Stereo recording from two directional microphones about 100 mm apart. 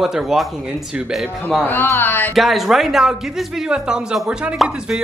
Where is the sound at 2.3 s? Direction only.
Centre (ahead or behind).